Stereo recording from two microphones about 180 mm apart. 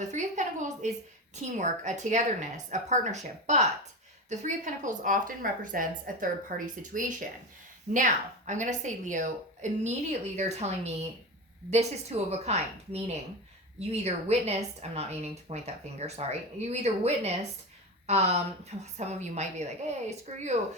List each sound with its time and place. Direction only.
0.0 s a woman's voice: 40° right (ahead or behind)